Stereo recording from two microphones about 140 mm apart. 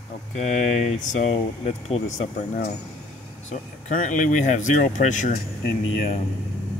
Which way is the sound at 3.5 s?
65° left (ahead or behind).